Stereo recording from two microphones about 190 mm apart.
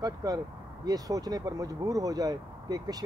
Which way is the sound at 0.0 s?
20° right (ahead or behind).